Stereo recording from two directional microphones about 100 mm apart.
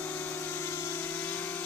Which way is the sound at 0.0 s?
20° left (ahead or behind).